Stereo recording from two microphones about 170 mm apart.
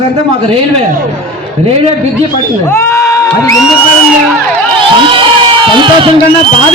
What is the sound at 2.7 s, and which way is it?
Speech, 20° left (ahead or behind).